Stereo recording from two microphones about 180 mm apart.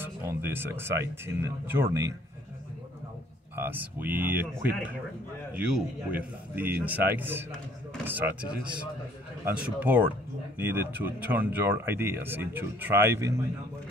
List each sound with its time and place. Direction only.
0.0 s speech: 15° right (ahead or behind)
3.5 s speech: 10° right (ahead or behind)
9.4 s speech: 10° right (ahead or behind)